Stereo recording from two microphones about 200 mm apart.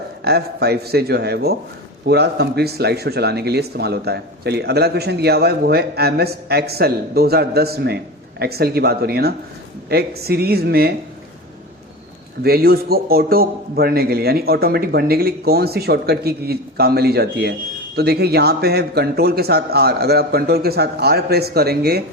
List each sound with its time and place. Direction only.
0.3 s speech: 55° right (ahead or behind)
12.4 s speech: 50° right (ahead or behind)